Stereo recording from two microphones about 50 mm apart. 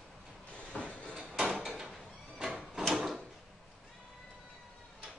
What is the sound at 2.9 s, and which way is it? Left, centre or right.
Drawer open or close, centre.